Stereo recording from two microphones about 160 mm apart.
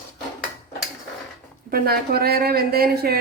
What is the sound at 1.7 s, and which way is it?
A man's voice, 70° right (ahead or behind).